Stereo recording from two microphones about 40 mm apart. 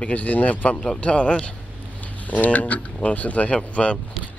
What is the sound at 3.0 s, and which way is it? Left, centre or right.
Speech, left.